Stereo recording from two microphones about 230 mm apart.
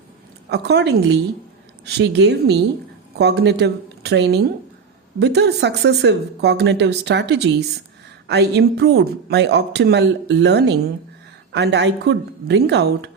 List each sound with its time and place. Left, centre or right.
0.5 s speech: right